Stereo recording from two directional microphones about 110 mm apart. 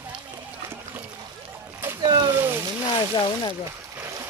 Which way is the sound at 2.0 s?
40° right (ahead or behind).